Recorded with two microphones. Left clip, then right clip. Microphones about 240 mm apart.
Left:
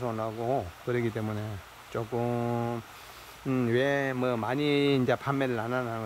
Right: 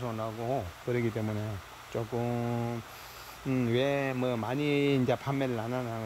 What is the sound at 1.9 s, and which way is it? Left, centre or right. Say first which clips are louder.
Speech: left 2 dB; centre.